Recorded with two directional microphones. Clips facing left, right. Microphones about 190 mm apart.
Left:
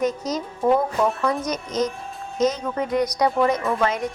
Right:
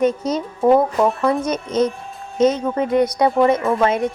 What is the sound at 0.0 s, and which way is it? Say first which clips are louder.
Speech: right 5 dB; 30° right (ahead or behind).